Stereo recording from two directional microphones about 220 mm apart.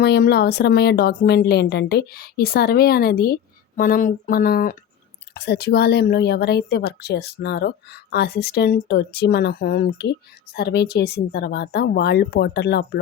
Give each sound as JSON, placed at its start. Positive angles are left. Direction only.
{"t": 0.0, "sound": "speech", "side_deg": 45}